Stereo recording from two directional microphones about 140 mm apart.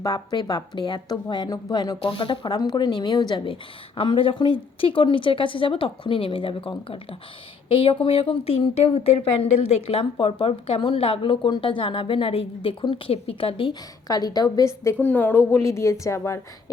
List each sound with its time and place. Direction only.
0.0 s a woman's voice: 30° left (ahead or behind)
2.0 s speech: 40° left (ahead or behind)
14.1 s a woman's voice: 25° left (ahead or behind)